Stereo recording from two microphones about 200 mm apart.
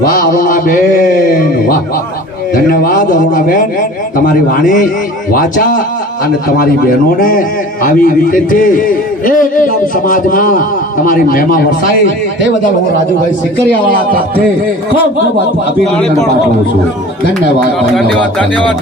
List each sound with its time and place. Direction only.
0.1 s mantra: 45° left (ahead or behind)
2.6 s a man's voice: 45° left (ahead or behind)
7.2 s a man's voice: 45° left (ahead or behind)
17.7 s speech: centre (ahead or behind)